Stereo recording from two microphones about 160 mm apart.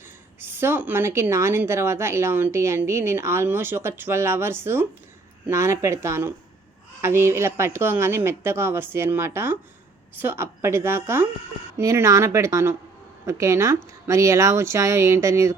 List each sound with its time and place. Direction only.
0.3 s a woman's voice: 15° right (ahead or behind)